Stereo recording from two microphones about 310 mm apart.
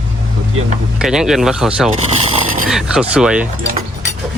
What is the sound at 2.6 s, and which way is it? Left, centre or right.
Speech, centre.